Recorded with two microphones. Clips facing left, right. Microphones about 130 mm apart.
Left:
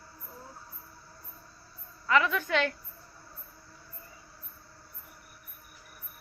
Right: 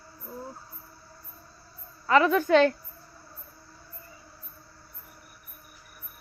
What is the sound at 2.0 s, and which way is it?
Speech, 35° right (ahead or behind).